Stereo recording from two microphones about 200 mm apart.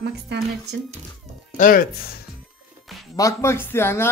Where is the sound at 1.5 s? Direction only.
40° left (ahead or behind).